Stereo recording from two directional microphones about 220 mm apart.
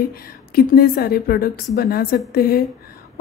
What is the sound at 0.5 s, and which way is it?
A woman's voice, 45° left (ahead or behind).